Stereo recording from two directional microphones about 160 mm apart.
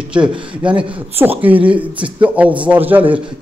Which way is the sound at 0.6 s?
5° right (ahead or behind).